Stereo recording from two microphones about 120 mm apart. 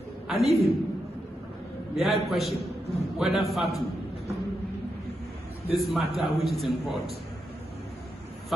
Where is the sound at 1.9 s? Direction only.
Centre (ahead or behind).